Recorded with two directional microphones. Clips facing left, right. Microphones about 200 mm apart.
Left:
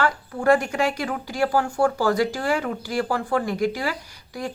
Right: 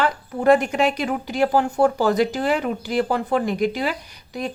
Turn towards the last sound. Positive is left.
turn(degrees=-20)  # may be behind; listen again after turning